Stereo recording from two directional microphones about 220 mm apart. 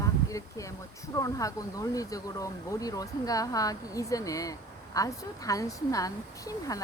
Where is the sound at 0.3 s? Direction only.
15° left (ahead or behind).